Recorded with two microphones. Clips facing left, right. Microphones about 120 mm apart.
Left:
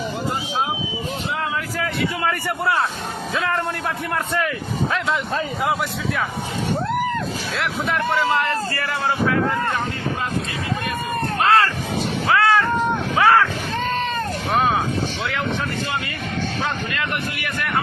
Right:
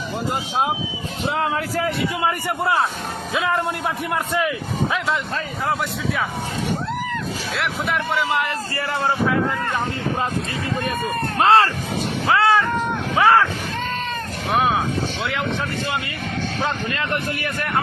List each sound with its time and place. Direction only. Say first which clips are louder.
1.8 s a man's voice: even; 25° right (ahead or behind)
3.3 s a man's voice: right 2 dB; 10° right (ahead or behind)
7.5 s a man's voice: even; centre (ahead or behind)
8.7 s a man's voice: right 1 dB; 25° right (ahead or behind)
11.3 s a man's voice: right 2 dB; 30° right (ahead or behind)
12.3 s cat: even; 25° right (ahead or behind)
13.1 s a man's voice: right 1 dB; 25° right (ahead or behind)